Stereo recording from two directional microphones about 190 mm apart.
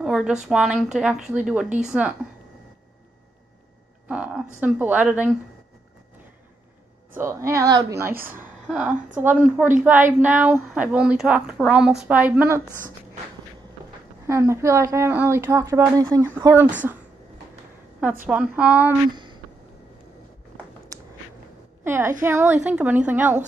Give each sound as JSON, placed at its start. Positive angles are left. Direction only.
{"t": 0.0, "sound": "a woman's voice", "side_deg": -5}
{"t": 4.1, "sound": "a woman's voice", "side_deg": -5}
{"t": 7.2, "sound": "a woman's voice", "side_deg": -15}
{"t": 14.2, "sound": "a woman's voice", "side_deg": -15}
{"t": 18.2, "sound": "a woman's voice", "side_deg": -5}
{"t": 19.1, "sound": "a sound", "side_deg": -25}
{"t": 21.8, "sound": "a woman's voice", "side_deg": -10}